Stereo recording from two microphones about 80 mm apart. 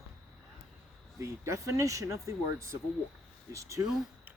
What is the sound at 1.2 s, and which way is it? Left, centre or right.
Speech, right.